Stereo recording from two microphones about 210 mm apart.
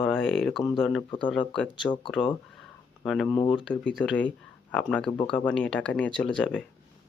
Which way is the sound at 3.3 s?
20° left (ahead or behind).